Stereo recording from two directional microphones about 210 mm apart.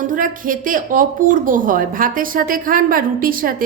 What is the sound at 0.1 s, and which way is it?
A woman's voice, 40° right (ahead or behind).